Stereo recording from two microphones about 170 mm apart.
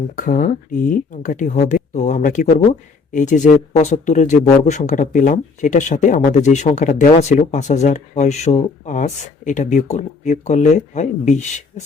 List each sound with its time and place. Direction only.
0.2 s speech: 50° left (ahead or behind)